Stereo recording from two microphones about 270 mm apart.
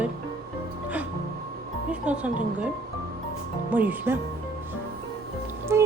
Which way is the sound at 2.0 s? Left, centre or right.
Centre.